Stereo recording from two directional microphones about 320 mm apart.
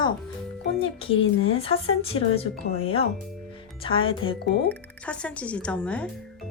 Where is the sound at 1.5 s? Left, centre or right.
Centre.